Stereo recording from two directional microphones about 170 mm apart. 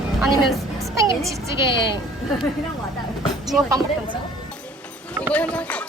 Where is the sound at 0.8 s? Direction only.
20° right (ahead or behind).